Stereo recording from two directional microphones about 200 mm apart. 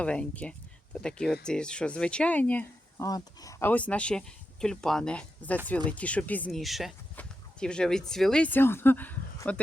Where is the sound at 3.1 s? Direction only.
20° left (ahead or behind).